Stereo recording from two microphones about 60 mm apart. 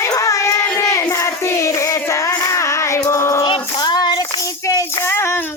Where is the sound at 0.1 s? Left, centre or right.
Left.